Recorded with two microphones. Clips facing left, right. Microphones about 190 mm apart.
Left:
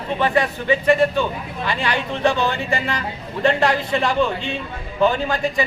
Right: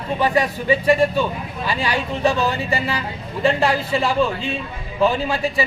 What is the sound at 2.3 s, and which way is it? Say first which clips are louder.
Speech: even; 35° right (ahead or behind).